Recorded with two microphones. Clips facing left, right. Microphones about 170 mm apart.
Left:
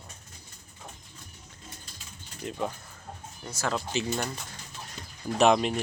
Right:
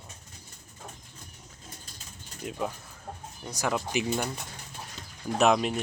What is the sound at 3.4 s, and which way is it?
Speech, 15° right (ahead or behind).